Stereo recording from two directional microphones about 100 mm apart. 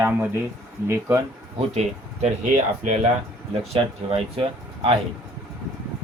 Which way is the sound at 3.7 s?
65° right (ahead or behind).